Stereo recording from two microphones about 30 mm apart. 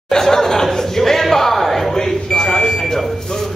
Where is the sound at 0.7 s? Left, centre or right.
Centre.